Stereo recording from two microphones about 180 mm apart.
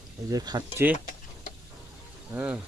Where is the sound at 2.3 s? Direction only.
10° right (ahead or behind).